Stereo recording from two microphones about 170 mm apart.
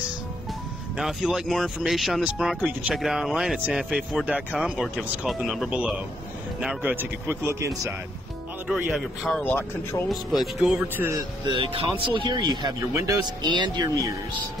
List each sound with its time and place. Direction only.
0.9 s speech: 5° right (ahead or behind)
8.6 s speech: 5° right (ahead or behind)
11.4 s speech: 30° right (ahead or behind)